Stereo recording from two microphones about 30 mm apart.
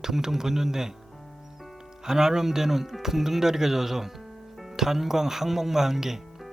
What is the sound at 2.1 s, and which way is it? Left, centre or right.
Speech, centre.